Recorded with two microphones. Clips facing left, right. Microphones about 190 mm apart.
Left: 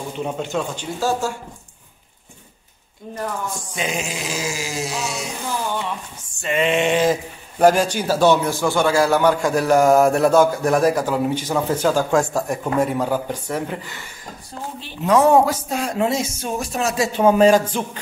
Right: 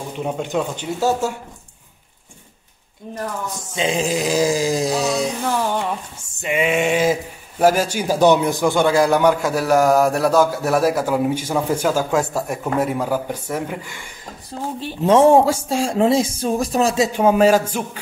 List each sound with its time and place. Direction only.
0.2 s speech: 10° right (ahead or behind)
3.6 s speech: 25° right (ahead or behind)
6.4 s speech: 10° right (ahead or behind)
15.0 s speech: 30° right (ahead or behind)
16.9 s speech: 20° right (ahead or behind)
17.2 s speech: 10° right (ahead or behind)